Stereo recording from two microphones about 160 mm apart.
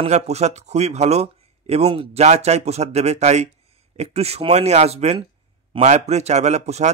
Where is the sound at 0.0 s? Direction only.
45° right (ahead or behind).